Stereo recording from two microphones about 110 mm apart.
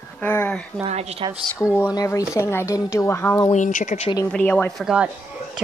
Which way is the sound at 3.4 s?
75° left (ahead or behind).